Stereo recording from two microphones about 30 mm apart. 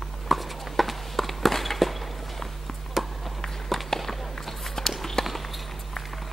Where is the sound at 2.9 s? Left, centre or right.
Centre.